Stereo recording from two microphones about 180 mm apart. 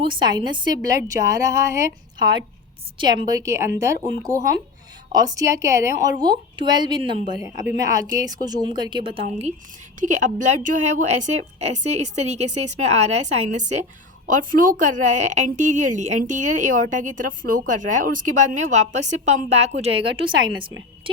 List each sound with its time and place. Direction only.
0.0 s a woman's voice: 25° right (ahead or behind)